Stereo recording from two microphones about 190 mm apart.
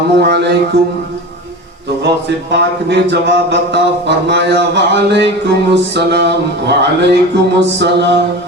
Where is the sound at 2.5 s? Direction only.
65° right (ahead or behind).